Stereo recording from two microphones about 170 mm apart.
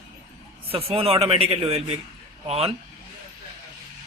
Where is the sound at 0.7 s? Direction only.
35° right (ahead or behind).